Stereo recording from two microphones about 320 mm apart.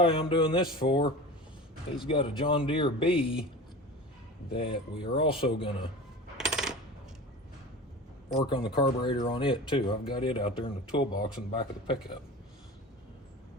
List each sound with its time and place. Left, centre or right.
0.0 s speech: centre
4.5 s speech: centre
6.3 s coin: centre
8.4 s speech: centre